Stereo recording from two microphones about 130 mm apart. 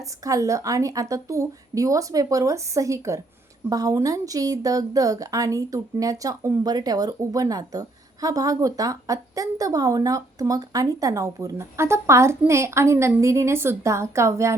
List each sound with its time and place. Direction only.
0.3 s speech: 25° right (ahead or behind)